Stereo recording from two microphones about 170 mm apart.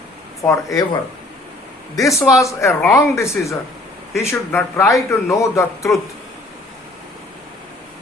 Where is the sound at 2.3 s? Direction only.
20° left (ahead or behind).